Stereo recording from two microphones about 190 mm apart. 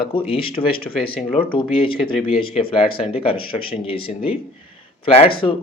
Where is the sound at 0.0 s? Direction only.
30° left (ahead or behind).